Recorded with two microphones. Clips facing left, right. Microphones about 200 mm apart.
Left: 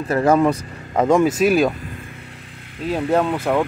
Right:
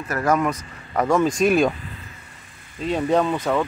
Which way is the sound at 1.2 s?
5° left (ahead or behind).